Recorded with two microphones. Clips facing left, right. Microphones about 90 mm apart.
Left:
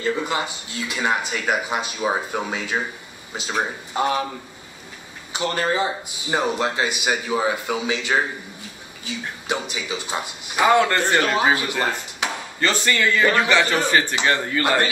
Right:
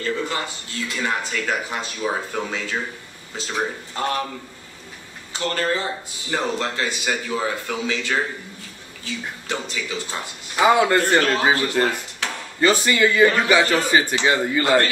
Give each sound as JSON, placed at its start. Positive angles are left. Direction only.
{"t": 0.0, "sound": "speech", "side_deg": 15}
{"t": 5.3, "sound": "speech", "side_deg": 15}
{"t": 10.6, "sound": "speech", "side_deg": -10}
{"t": 11.1, "sound": "speech", "side_deg": 15}
{"t": 12.5, "sound": "speech", "side_deg": -10}